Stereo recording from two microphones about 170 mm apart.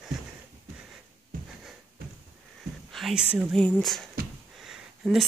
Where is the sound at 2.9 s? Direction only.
Centre (ahead or behind).